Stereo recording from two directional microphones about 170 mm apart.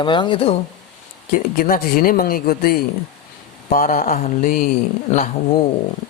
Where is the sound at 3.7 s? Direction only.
50° left (ahead or behind).